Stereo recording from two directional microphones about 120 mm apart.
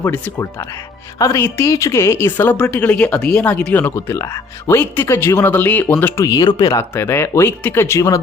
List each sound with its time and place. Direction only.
0.0 s a woman's voice: 20° left (ahead or behind)
3.9 s speech: 25° left (ahead or behind)
6.9 s speech: 20° left (ahead or behind)